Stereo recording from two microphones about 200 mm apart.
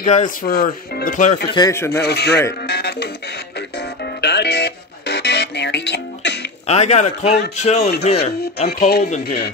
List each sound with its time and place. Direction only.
0.0 s speech: 35° left (ahead or behind)
1.5 s speech: 15° left (ahead or behind)
2.0 s speech: 55° left (ahead or behind)
4.2 s music: 55° left (ahead or behind)
6.7 s speech: 35° left (ahead or behind)
8.6 s speech: 50° left (ahead or behind)